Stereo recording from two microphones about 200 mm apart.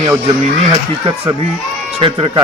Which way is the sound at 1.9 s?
30° right (ahead or behind).